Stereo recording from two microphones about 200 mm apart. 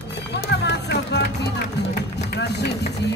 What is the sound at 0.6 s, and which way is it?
Music, 60° left (ahead or behind).